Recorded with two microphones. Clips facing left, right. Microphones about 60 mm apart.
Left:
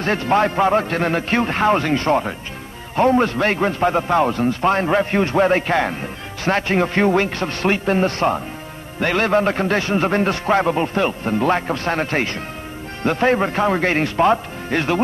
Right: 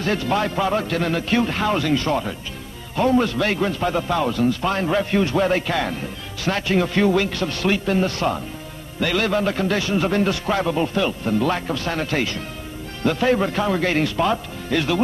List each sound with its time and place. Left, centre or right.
0.0 s a man's voice: left